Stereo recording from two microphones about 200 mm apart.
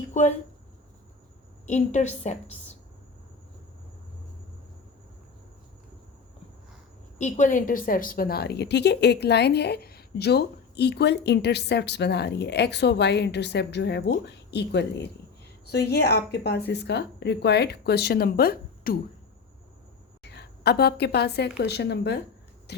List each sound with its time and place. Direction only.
0.1 s speech: 35° left (ahead or behind)
1.6 s a woman's voice: 35° left (ahead or behind)
7.2 s a woman's voice: 35° left (ahead or behind)
20.2 s a woman's voice: 55° left (ahead or behind)